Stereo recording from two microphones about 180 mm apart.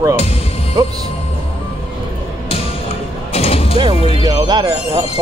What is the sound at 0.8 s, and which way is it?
Music, 20° right (ahead or behind).